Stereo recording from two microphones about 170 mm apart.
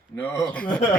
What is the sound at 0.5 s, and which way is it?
Speech, 5° left (ahead or behind).